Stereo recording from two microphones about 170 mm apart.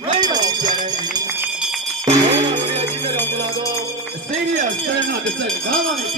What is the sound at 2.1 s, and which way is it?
Music, 30° right (ahead or behind).